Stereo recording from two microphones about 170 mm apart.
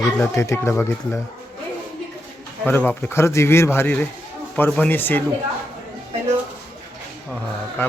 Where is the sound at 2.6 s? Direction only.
10° left (ahead or behind).